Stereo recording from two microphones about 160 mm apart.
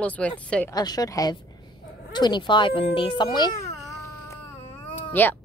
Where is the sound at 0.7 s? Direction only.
25° left (ahead or behind).